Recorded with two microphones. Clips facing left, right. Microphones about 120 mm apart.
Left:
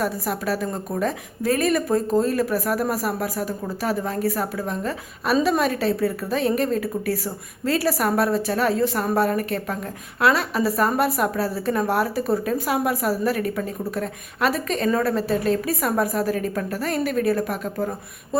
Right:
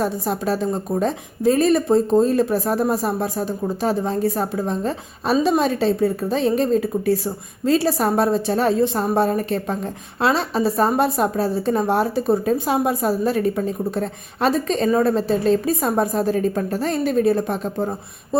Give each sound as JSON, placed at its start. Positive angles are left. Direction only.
{"t": 0.0, "sound": "a woman's voice", "side_deg": -25}